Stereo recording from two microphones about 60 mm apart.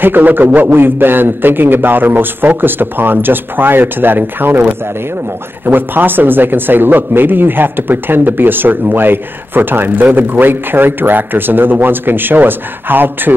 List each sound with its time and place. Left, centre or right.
0.0 s speech: right